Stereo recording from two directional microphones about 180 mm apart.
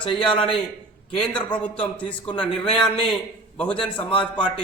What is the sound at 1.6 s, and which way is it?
A man's voice, 5° left (ahead or behind).